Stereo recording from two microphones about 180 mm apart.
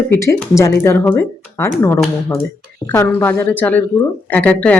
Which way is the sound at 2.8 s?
20° left (ahead or behind).